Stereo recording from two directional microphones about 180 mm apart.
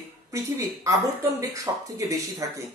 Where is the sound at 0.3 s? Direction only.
15° right (ahead or behind).